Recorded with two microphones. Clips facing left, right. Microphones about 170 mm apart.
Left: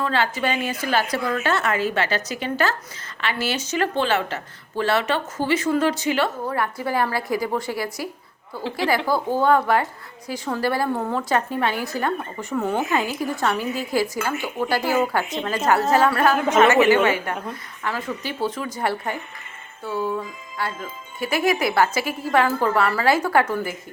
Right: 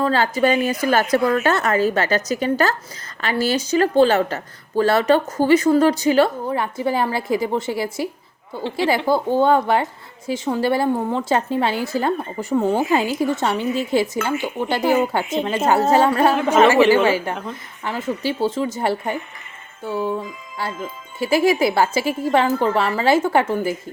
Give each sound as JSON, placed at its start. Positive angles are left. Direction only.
{"t": 0.0, "sound": "speech", "side_deg": -40}
{"t": 6.5, "sound": "a woman's voice", "side_deg": -25}
{"t": 9.0, "sound": "a woman's voice", "side_deg": -25}